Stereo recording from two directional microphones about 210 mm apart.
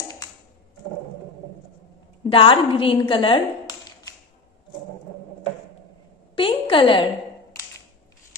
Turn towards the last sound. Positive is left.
turn(degrees=25)  # may be behind; listen again after turning